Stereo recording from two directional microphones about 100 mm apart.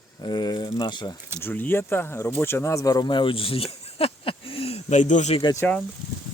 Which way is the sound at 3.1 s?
60° left (ahead or behind).